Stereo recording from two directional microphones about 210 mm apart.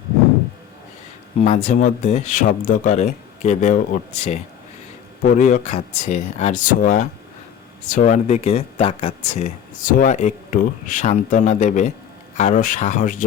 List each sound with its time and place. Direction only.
1.4 s speech: 30° left (ahead or behind)
5.2 s speech: 35° left (ahead or behind)